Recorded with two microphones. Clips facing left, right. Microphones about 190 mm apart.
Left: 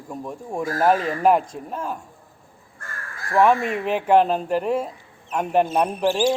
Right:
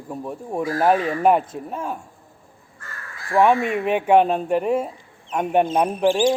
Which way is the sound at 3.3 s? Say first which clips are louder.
Right 1 dB; 5° right (ahead or behind).